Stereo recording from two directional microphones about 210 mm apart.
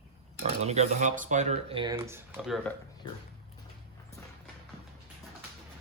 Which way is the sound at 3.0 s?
20° left (ahead or behind).